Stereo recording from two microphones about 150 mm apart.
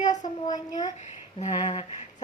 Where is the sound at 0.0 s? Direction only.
55° left (ahead or behind).